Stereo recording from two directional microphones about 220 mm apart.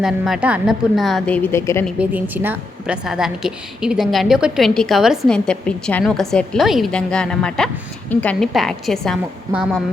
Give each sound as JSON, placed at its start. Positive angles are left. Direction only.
{"t": 0.0, "sound": "a woman's voice", "side_deg": -5}
{"t": 2.0, "sound": "a woman's voice", "side_deg": -10}